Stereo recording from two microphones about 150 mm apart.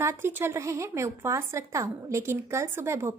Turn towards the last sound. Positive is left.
turn(degrees=-15)  # may be behind; listen again after turning